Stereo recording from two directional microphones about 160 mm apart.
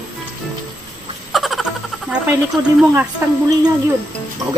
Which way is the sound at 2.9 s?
15° right (ahead or behind).